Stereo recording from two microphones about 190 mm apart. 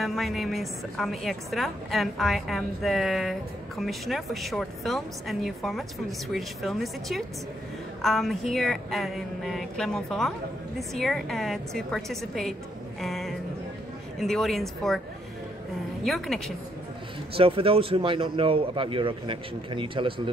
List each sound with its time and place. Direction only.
0.0 s a woman's voice: centre (ahead or behind)
13.0 s music: centre (ahead or behind)
14.2 s a woman's voice: centre (ahead or behind)
16.0 s a woman's voice: centre (ahead or behind)
17.4 s a man's voice: 30° right (ahead or behind)